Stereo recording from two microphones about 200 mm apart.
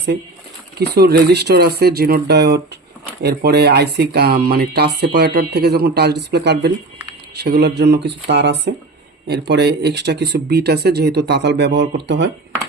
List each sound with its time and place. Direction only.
0.8 s speech: 55° right (ahead or behind)